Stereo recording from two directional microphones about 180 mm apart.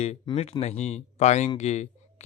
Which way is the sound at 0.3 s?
35° left (ahead or behind).